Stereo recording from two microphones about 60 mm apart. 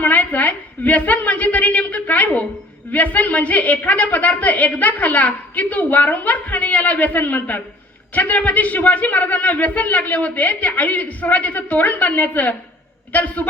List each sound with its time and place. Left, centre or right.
0.0 s a woman's voice: left